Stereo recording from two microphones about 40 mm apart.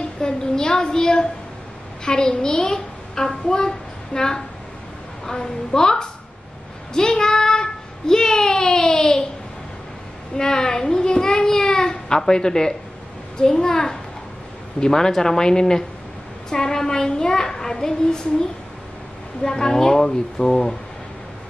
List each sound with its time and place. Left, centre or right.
0.2 s a child's voice: centre
6.9 s child singing: centre
10.3 s a child's voice: centre